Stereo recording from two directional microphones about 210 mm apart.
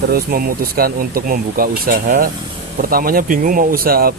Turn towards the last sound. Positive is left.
turn(degrees=-45)  # may be behind; listen again after turning